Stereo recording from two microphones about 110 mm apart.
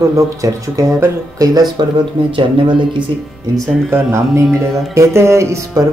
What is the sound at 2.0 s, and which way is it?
Speech, 50° right (ahead or behind).